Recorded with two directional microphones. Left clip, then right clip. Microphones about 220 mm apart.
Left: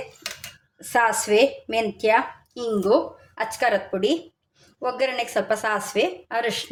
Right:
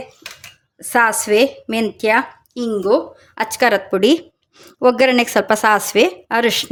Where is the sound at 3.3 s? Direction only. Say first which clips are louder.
Right 7 dB; 45° right (ahead or behind).